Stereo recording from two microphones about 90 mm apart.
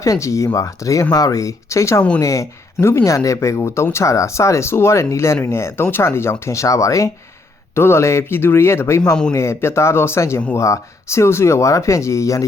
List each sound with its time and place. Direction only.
0.0 s speech: 35° left (ahead or behind)